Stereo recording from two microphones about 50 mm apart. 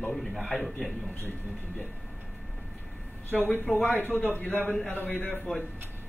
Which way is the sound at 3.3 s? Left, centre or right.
Left.